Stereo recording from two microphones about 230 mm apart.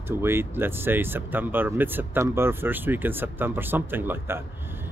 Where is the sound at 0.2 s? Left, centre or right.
Centre.